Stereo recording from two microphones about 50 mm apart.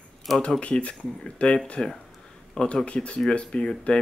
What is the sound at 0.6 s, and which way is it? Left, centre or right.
Speech, left.